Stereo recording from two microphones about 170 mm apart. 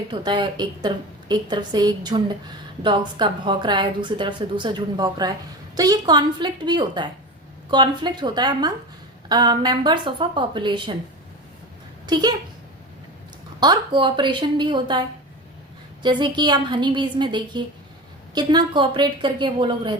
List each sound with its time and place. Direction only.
0.1 s a woman's voice: 25° right (ahead or behind)
12.0 s speech: 25° right (ahead or behind)
13.6 s a woman's voice: 25° right (ahead or behind)
16.0 s a woman's voice: 25° right (ahead or behind)